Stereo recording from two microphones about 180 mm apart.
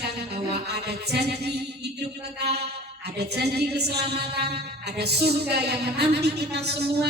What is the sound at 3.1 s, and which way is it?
A woman's voice, 65° right (ahead or behind).